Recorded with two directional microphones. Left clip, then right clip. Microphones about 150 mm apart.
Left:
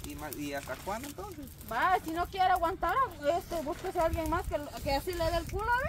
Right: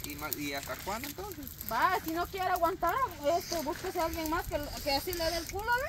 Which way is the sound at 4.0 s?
60° right (ahead or behind).